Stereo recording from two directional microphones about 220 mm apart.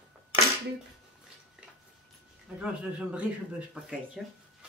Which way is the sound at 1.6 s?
5° right (ahead or behind).